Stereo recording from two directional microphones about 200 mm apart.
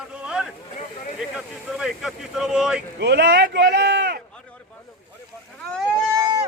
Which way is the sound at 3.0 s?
55° right (ahead or behind).